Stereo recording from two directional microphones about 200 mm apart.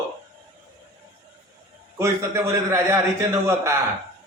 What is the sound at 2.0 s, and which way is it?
A man's voice, 15° right (ahead or behind).